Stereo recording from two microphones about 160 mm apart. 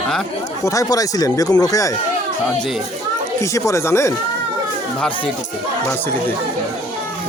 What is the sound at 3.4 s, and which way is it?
Speech, 20° left (ahead or behind).